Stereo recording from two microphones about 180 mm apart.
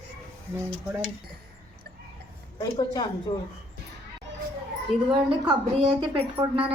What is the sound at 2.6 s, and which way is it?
Speech, 20° left (ahead or behind).